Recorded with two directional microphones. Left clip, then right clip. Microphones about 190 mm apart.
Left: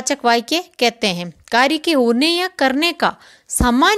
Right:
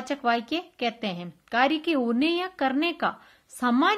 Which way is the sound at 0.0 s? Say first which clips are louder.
Left 9 dB; 40° left (ahead or behind).